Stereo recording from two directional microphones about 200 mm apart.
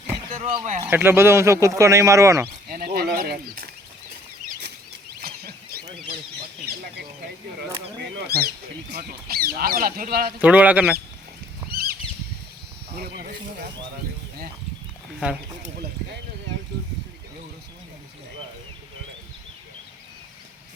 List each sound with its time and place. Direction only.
0.4 s speech: 30° right (ahead or behind)
0.9 s speech: 10° right (ahead or behind)
2.6 s a sound: 45° right (ahead or behind)
4.6 s bird flight: 55° right (ahead or behind)
8.1 s duck: 55° right (ahead or behind)
10.4 s speech: 5° right (ahead or behind)
11.7 s a sound: 50° right (ahead or behind)
13.0 s snake: 50° right (ahead or behind)